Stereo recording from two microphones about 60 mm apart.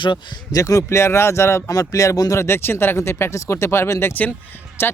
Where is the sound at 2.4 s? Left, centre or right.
Left.